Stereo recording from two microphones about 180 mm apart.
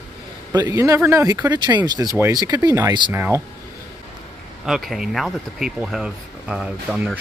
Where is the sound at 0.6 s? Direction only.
20° right (ahead or behind).